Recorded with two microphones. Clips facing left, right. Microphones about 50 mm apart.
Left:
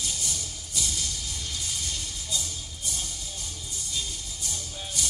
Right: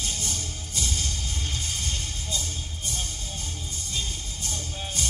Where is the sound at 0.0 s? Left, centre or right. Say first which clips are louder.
Right 2 dB; right.